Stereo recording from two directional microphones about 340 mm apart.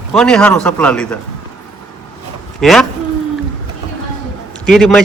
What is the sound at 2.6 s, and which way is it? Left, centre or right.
Speech, centre.